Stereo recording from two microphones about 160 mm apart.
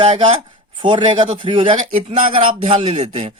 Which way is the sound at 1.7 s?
50° right (ahead or behind).